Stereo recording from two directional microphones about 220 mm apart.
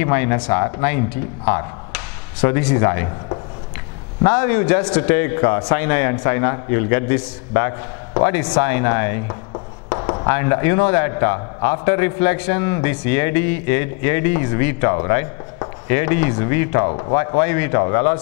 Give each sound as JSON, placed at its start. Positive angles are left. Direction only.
{"t": 0.0, "sound": "a man's voice", "side_deg": 15}
{"t": 4.2, "sound": "a man's voice", "side_deg": 10}
{"t": 16.8, "sound": "speech", "side_deg": 25}
{"t": 17.4, "sound": "a man's voice", "side_deg": 15}